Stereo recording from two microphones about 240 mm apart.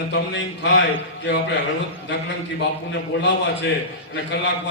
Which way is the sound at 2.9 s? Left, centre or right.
Left.